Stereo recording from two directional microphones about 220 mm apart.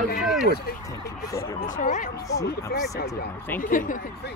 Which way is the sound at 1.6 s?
35° left (ahead or behind).